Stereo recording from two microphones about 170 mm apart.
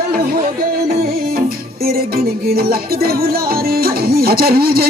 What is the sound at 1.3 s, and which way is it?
Music, 60° right (ahead or behind).